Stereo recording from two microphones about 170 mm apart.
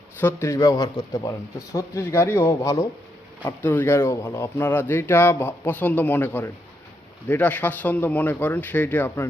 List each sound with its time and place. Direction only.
0.2 s speech: 15° left (ahead or behind)